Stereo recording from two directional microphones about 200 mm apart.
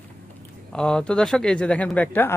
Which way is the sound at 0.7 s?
5° left (ahead or behind).